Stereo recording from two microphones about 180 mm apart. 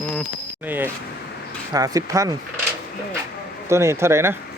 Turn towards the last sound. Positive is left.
turn(degrees=-15)  # may be behind; listen again after turning